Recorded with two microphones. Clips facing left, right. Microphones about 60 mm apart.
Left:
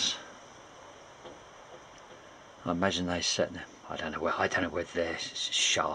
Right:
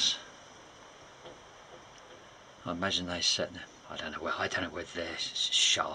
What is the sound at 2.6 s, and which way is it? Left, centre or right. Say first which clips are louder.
Speech: left 4 dB; left.